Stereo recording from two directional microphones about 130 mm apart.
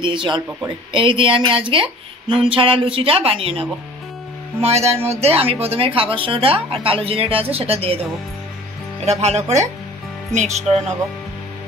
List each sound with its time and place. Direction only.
0.0 s speech: 40° right (ahead or behind)
9.0 s speech: 55° right (ahead or behind)